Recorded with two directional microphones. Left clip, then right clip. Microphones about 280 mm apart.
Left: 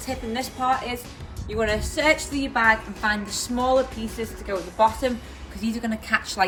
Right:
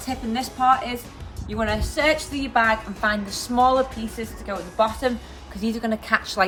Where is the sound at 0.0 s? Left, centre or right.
Centre.